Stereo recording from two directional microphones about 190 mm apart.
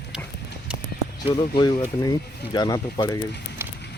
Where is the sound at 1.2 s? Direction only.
30° left (ahead or behind).